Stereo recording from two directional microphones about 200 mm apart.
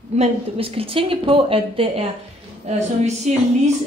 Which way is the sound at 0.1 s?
30° right (ahead or behind).